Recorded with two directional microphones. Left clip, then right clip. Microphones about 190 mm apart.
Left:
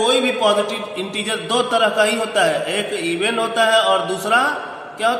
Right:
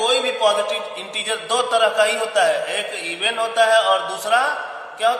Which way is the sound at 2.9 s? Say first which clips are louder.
Left 2 dB; 15° left (ahead or behind).